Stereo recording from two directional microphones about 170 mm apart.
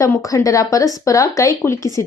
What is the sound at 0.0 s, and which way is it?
Speech, 20° left (ahead or behind).